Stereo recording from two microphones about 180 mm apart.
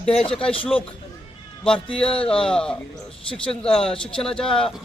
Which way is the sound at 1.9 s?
30° left (ahead or behind).